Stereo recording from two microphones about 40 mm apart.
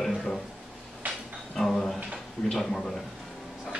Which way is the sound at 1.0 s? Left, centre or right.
Right.